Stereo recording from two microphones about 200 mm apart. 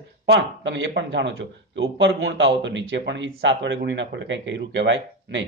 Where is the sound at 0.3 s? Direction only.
65° right (ahead or behind).